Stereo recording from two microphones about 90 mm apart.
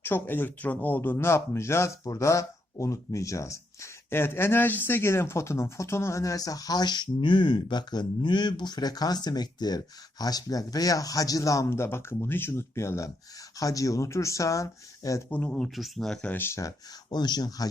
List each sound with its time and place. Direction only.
0.0 s speech: 25° left (ahead or behind)
15.3 s speech: 15° left (ahead or behind)
16.3 s speech: 25° left (ahead or behind)
17.1 s speech: 55° left (ahead or behind)